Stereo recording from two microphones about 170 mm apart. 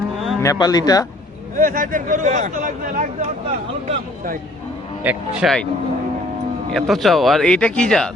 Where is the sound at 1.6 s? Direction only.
55° right (ahead or behind).